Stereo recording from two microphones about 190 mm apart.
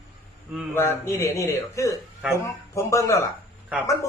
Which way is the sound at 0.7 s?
15° left (ahead or behind).